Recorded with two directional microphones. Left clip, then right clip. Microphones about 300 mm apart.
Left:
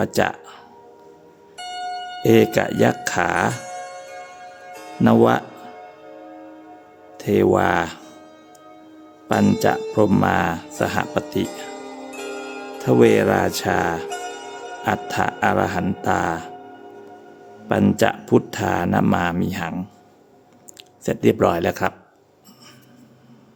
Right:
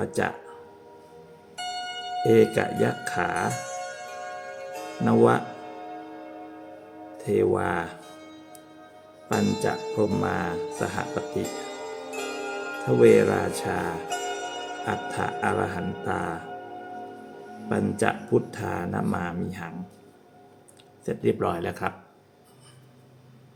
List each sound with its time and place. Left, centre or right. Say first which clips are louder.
0.0 s speech: left 7 dB; left
1.5 s zither: left 1 dB; centre
2.2 s speech: left 4 dB; left
4.7 s music: left 1 dB; centre
5.0 s speech: left 4 dB; left
7.3 s speech: left 7 dB; left
9.4 s speech: left 9 dB; left
12.1 s zither: left 2 dB; centre
13.0 s speech: left 2 dB; left
17.7 s speech: left 7 dB; left
21.0 s speech: left 8 dB; left